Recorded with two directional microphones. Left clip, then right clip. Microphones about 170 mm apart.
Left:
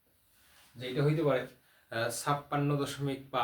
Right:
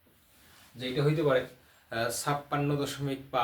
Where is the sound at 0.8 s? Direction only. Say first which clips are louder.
Right 2 dB; 10° left (ahead or behind).